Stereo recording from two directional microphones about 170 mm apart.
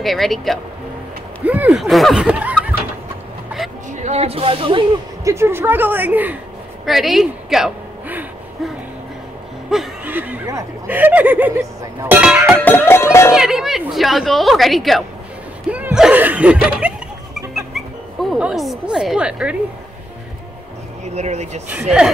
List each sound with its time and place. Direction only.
0.0 s a woman's voice: centre (ahead or behind)
3.9 s speech: 40° right (ahead or behind)
5.2 s speech: 15° right (ahead or behind)
6.9 s a sound: centre (ahead or behind)
9.7 s speech: 5° right (ahead or behind)
12.6 s music: 10° left (ahead or behind)
13.3 s a woman's voice: 5° right (ahead or behind)
15.7 s laughter: 5° right (ahead or behind)
17.6 s dog: centre (ahead or behind)
21.0 s speech: 40° right (ahead or behind)